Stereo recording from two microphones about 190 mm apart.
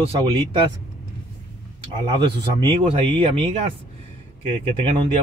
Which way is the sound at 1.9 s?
25° right (ahead or behind).